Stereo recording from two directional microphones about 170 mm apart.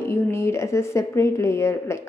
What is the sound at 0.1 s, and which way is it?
A woman's voice, 15° left (ahead or behind).